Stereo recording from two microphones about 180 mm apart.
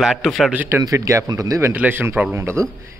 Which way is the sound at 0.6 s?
15° right (ahead or behind).